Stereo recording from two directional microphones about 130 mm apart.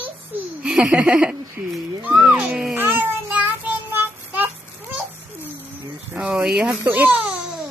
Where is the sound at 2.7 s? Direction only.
15° right (ahead or behind).